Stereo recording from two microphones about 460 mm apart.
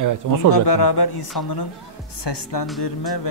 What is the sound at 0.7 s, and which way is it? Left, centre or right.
Speech, left.